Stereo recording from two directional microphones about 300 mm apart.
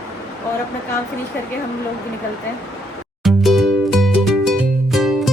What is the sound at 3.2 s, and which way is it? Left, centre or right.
Music, centre.